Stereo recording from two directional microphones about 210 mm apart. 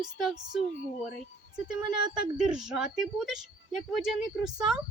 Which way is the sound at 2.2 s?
5° right (ahead or behind).